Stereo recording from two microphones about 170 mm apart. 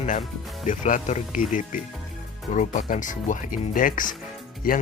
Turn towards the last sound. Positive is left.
turn(degrees=55)  # may be behind; listen again after turning